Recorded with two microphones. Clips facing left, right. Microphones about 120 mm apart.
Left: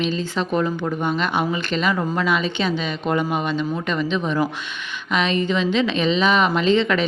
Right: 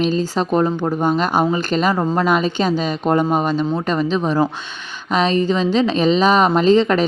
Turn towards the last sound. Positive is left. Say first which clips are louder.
# right 5 dB
turn(degrees=-40)  # may be behind; listen again after turning